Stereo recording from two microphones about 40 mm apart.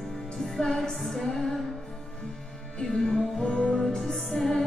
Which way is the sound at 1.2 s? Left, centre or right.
Centre.